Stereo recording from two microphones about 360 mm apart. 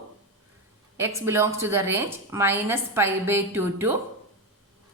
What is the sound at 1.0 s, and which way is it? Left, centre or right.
A woman's voice, centre.